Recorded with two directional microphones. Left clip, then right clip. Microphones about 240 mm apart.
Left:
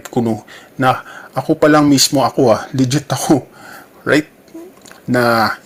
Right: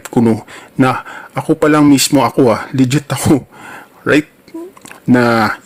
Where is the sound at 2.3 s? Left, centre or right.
Centre.